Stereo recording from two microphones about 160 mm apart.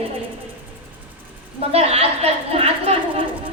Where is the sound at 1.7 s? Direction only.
40° right (ahead or behind).